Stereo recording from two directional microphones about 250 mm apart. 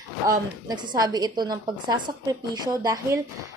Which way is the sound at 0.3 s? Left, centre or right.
Centre.